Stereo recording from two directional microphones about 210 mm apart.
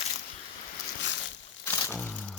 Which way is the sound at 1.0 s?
60° left (ahead or behind).